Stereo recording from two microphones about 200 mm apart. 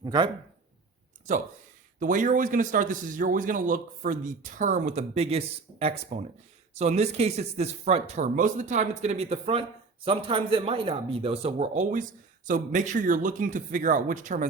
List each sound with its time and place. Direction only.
0.0 s speech: 20° right (ahead or behind)
2.0 s speech: 40° right (ahead or behind)